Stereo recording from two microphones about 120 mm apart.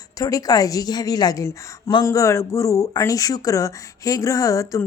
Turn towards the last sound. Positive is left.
turn(degrees=25)  # may be behind; listen again after turning